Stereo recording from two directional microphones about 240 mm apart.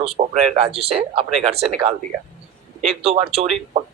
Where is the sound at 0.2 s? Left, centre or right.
Right.